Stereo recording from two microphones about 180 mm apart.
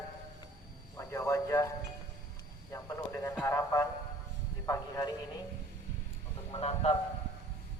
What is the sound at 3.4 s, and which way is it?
Speech, 15° left (ahead or behind).